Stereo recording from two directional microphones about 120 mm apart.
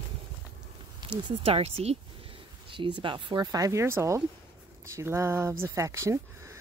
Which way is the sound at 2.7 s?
45° right (ahead or behind).